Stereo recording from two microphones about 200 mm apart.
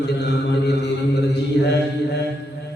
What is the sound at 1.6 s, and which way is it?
Mantra, 60° left (ahead or behind).